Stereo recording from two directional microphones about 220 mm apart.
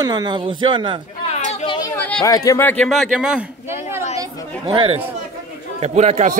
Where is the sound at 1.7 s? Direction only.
15° left (ahead or behind); by 3.8 s 5° right (ahead or behind).